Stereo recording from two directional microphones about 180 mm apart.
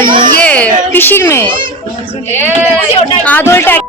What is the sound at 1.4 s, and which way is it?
Speech, 25° right (ahead or behind).